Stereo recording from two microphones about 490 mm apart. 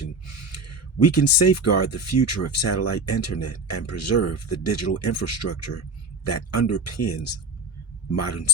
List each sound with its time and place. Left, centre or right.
0.5 s speech: left